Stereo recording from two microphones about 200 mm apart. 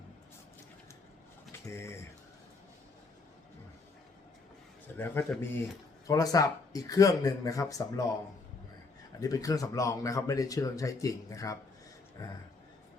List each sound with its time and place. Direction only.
1.7 s speech: 15° left (ahead or behind)
4.9 s speech: 10° left (ahead or behind)
9.2 s speech: 15° left (ahead or behind)